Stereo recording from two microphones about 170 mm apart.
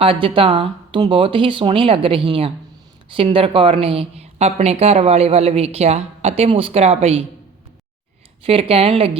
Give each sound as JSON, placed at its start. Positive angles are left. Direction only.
{"t": 0.0, "sound": "speech", "side_deg": -30}
{"t": 8.4, "sound": "speech", "side_deg": -35}